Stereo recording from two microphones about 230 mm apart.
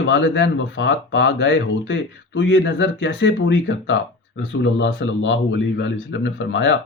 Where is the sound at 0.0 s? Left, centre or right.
Left.